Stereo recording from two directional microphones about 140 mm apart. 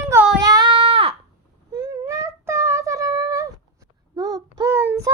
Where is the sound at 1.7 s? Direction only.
25° right (ahead or behind).